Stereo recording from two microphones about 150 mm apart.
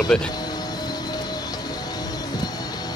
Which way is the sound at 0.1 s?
5° left (ahead or behind).